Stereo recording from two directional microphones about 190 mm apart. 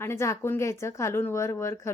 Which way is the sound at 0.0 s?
15° left (ahead or behind).